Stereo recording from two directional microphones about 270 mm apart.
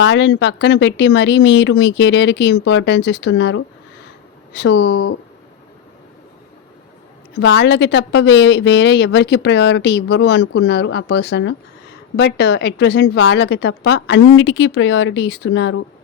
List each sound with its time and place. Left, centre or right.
0.0 s a woman's voice: left
7.3 s a woman's voice: left